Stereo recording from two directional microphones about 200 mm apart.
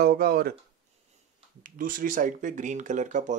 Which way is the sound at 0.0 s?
50° right (ahead or behind).